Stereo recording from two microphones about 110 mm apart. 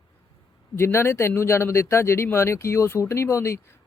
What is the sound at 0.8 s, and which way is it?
Speech, 20° left (ahead or behind).